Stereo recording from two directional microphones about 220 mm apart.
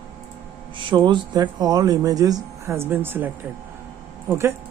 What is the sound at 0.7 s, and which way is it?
Speech, 20° right (ahead or behind).